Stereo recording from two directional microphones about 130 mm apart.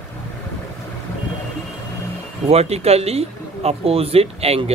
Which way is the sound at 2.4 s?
55° right (ahead or behind).